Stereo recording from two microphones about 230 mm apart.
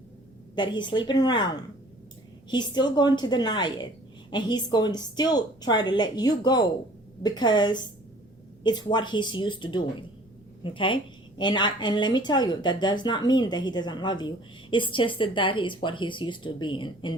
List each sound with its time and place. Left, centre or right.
0.5 s a woman's voice: centre